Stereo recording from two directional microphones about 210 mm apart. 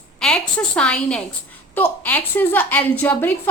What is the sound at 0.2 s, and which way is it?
A woman's voice, 5° left (ahead or behind).